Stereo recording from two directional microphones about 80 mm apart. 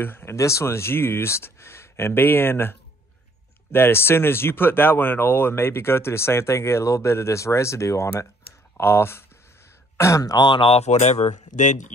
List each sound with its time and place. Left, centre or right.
0.0 s speech: left
10.3 s speech: left